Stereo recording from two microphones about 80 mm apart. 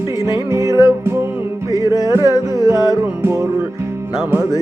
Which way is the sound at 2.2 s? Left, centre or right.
Left.